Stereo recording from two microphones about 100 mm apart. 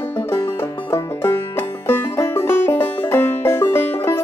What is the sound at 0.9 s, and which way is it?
Music, 30° left (ahead or behind).